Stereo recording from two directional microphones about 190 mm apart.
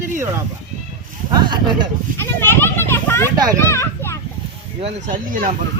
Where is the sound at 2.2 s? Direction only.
10° left (ahead or behind).